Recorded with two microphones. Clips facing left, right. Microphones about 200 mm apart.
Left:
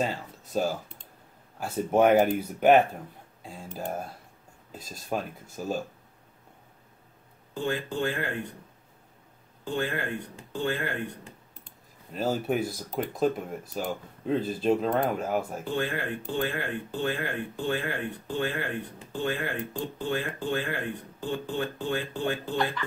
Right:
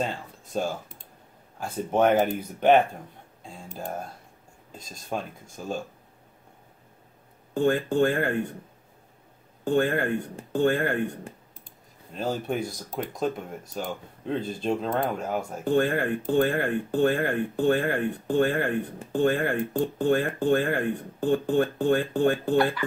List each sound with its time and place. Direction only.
0.0 s speech: 5° left (ahead or behind)
7.5 s speech: 50° right (ahead or behind)
9.7 s speech: 50° right (ahead or behind)
12.1 s speech: 5° left (ahead or behind)
15.6 s speech: 50° right (ahead or behind)